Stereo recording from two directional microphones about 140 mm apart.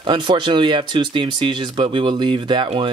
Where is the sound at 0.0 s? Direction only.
35° right (ahead or behind).